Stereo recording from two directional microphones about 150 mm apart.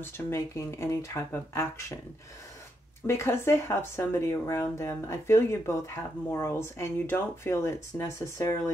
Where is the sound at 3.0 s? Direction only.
15° left (ahead or behind).